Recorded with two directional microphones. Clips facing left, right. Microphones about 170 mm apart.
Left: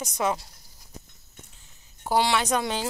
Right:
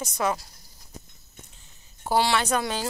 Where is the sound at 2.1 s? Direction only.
15° left (ahead or behind).